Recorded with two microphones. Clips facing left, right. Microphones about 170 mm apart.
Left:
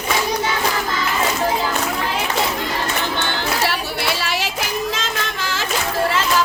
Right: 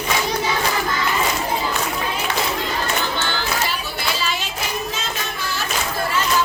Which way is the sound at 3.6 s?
70° left (ahead or behind).